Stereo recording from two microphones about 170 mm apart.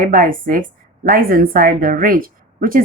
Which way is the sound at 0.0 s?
55° right (ahead or behind).